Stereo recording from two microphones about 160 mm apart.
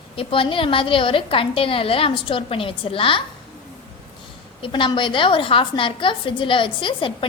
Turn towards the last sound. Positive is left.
turn(degrees=30)  # may be behind; listen again after turning